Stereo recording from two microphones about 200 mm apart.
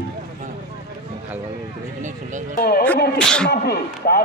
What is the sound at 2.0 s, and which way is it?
Speech, 40° right (ahead or behind).